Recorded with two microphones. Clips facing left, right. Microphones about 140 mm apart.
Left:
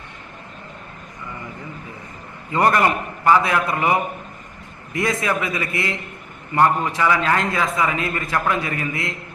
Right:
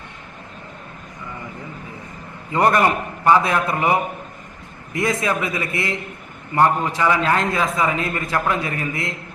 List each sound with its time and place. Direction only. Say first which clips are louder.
2.5 s a man's voice: right 1 dB; 20° right (ahead or behind)
5.2 s a man's voice: right 1 dB; 20° right (ahead or behind)